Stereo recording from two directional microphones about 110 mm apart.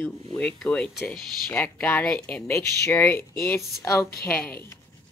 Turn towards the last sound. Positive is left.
turn(degrees=15)  # may be behind; listen again after turning